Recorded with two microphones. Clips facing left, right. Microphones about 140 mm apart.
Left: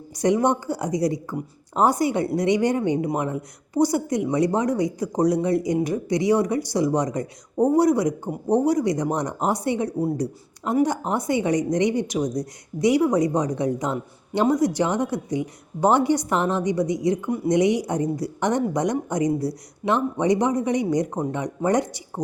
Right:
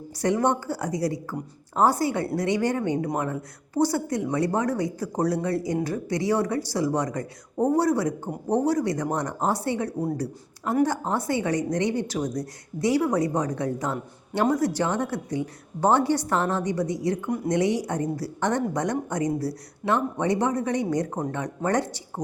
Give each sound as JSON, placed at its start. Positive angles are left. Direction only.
{"t": 0.2, "sound": "speech", "side_deg": 15}
{"t": 17.2, "sound": "speech", "side_deg": 0}
{"t": 17.5, "sound": "speech", "side_deg": 15}